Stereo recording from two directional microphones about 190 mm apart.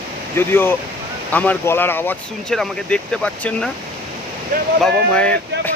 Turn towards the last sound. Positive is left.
turn(degrees=5)  # may be behind; listen again after turning